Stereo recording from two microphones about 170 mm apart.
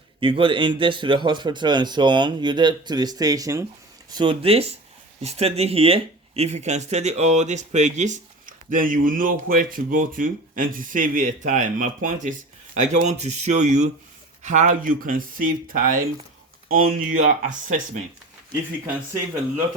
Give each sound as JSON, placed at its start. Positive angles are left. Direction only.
{"t": 0.2, "sound": "speech", "side_deg": -30}